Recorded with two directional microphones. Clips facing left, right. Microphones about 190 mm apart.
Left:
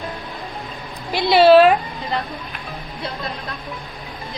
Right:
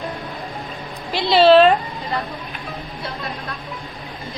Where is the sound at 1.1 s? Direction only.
10° left (ahead or behind).